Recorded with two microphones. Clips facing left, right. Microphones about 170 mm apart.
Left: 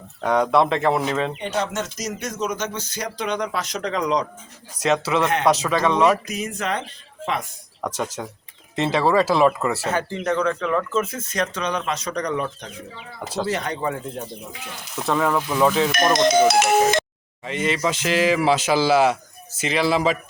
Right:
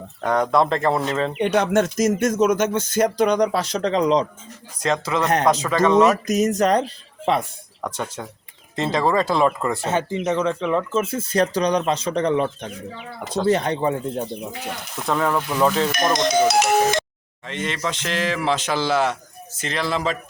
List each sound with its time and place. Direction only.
0.2 s speech: 5° left (ahead or behind)
1.4 s speech: 60° right (ahead or behind); by 4.3 s 25° right (ahead or behind)
4.8 s speech: 10° left (ahead or behind)
5.2 s speech: 40° right (ahead or behind)
5.6 s speech: 10° left (ahead or behind)
6.2 s speech: 45° right (ahead or behind)
7.8 s speech: 10° left (ahead or behind)
9.8 s a man's voice: 25° right (ahead or behind)
10.1 s speech: 15° right (ahead or behind)
11.0 s a man's voice: 30° right (ahead or behind)
15.0 s speech: centre (ahead or behind)
16.3 s speech: 55° left (ahead or behind)
17.4 s speech: 5° left (ahead or behind)